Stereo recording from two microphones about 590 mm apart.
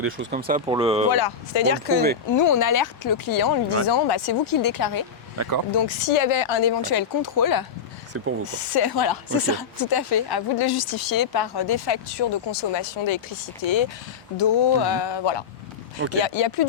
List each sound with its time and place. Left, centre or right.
0.0 s speech: centre
1.1 s speech: left
2.3 s speech: left
5.4 s speech: right
5.7 s speech: left
14.3 s speech: left